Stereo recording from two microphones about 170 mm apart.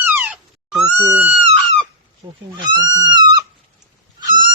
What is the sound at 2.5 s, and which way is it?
Speech, 25° right (ahead or behind).